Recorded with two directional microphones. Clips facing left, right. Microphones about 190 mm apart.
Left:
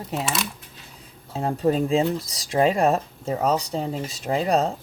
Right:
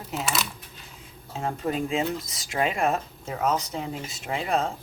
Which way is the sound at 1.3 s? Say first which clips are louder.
Left 6 dB; 35° left (ahead or behind).